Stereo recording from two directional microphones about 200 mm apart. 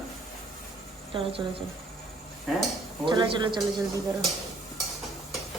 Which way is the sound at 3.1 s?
25° right (ahead or behind).